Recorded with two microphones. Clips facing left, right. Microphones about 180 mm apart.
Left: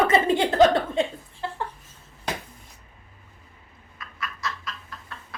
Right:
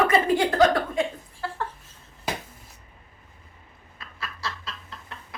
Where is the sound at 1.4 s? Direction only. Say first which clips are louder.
Left 1 dB; 20° left (ahead or behind).